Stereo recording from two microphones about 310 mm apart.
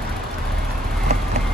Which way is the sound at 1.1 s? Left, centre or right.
Right.